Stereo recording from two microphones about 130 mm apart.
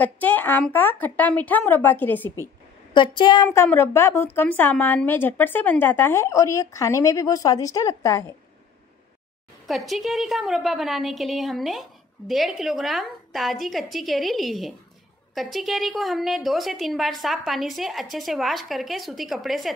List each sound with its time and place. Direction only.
0.0 s a woman's voice: 15° left (ahead or behind)
2.9 s a woman's voice: 35° left (ahead or behind)
3.4 s a woman's voice: 20° left (ahead or behind)
9.7 s a woman's voice: centre (ahead or behind)